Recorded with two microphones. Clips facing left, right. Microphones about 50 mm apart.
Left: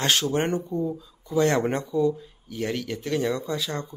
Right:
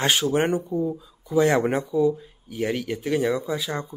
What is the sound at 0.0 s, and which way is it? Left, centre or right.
Speech, centre.